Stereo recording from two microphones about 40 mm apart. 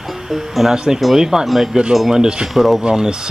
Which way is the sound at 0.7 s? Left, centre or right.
Centre.